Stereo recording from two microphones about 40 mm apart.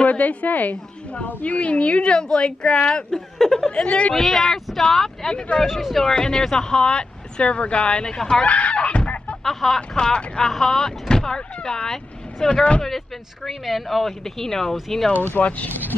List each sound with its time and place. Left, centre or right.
0.0 s a woman's voice: left
3.3 s speech: centre
3.6 s speech: left
4.1 s speech: centre
5.7 s speech: centre
5.9 s speech: centre
8.0 s speech: centre
8.5 s speech: left
9.4 s speech: centre
9.8 s speech: left
13.5 s speech: centre
15.4 s speech: left